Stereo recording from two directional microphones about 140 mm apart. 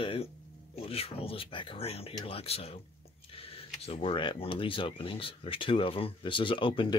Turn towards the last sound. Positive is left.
turn(degrees=35)  # may be behind; listen again after turning